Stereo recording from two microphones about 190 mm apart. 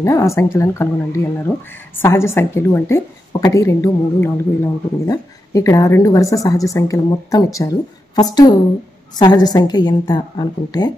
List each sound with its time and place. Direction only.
0.0 s a woman's voice: 15° left (ahead or behind)